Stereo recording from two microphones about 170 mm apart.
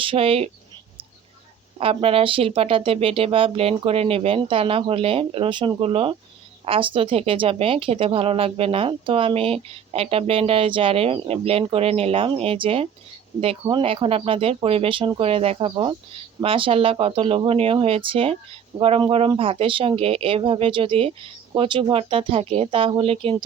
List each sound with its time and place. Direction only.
0.0 s speech: 30° right (ahead or behind)
1.8 s speech: 35° right (ahead or behind)